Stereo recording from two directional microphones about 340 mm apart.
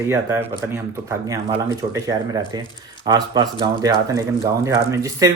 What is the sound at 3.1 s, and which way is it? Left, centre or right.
Speech, centre.